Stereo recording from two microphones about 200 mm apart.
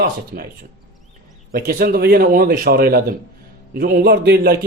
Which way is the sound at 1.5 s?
50° right (ahead or behind).